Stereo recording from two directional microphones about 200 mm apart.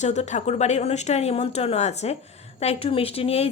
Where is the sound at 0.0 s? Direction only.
35° left (ahead or behind).